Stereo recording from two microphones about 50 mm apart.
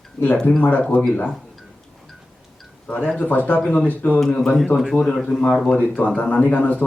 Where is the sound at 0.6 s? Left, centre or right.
Left.